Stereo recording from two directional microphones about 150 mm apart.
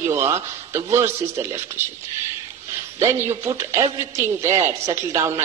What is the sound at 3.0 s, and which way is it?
Speech, 20° right (ahead or behind).